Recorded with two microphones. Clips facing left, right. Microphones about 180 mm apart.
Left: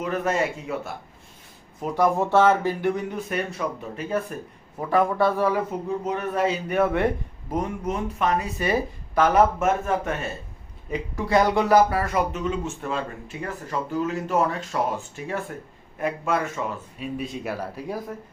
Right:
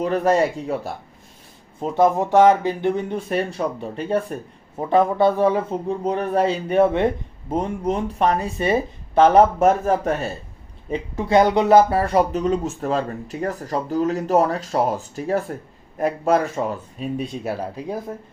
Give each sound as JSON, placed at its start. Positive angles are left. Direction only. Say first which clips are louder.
{"t": 0.0, "sound": "speech", "louder": "right 6 dB", "side_deg": -35}
{"t": 1.8, "sound": "speech", "louder": "right 4 dB", "side_deg": -20}
{"t": 6.1, "sound": "speech", "louder": "right 5 dB", "side_deg": -35}
{"t": 10.9, "sound": "speech", "louder": "right 4 dB", "side_deg": -25}
{"t": 17.6, "sound": "speech", "louder": "right 3 dB", "side_deg": -20}